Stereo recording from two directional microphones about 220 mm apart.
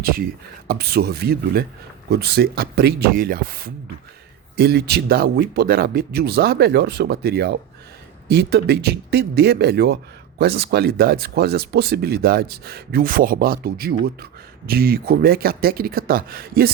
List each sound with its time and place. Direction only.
0.0 s speech: 40° right (ahead or behind)